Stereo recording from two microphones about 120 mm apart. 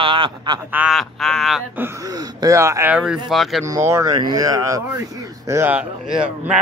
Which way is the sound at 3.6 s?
25° right (ahead or behind).